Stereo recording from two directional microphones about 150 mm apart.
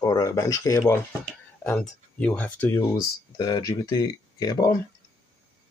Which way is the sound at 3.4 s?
25° left (ahead or behind).